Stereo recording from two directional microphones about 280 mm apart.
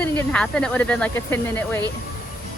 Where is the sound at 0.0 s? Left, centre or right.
Centre.